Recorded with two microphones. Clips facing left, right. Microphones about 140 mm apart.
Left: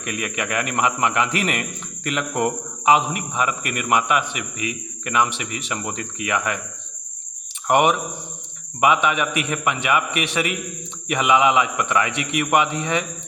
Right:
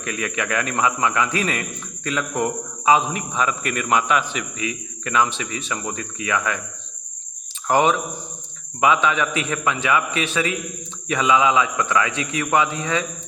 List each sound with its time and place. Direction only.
0.0 s a man's voice: 20° left (ahead or behind)
7.7 s a man's voice: 20° left (ahead or behind)